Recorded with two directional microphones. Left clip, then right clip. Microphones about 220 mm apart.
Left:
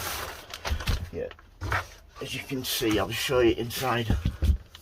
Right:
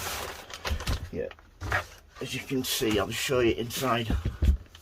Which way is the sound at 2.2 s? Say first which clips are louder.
Even; 40° right (ahead or behind).